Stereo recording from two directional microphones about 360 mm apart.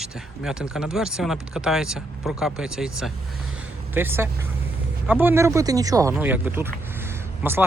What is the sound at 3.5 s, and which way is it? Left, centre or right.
Vehicle, centre.